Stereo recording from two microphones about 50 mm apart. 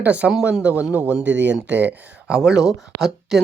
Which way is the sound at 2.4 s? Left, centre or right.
Centre.